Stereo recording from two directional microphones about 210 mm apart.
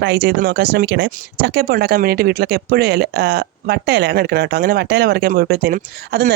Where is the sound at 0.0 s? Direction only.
55° right (ahead or behind).